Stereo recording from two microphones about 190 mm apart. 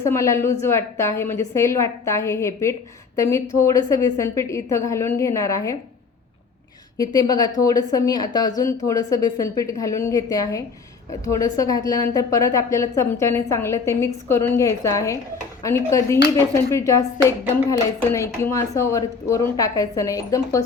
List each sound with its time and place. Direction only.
0.1 s a woman's voice: 15° left (ahead or behind)
7.0 s a woman's voice: 20° left (ahead or behind)